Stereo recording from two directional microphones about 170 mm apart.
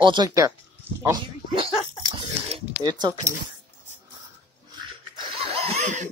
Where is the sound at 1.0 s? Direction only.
25° right (ahead or behind).